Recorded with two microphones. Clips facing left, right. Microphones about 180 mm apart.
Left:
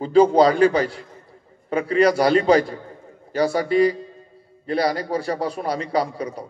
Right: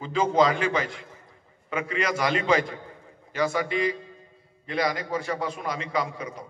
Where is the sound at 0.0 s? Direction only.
35° left (ahead or behind).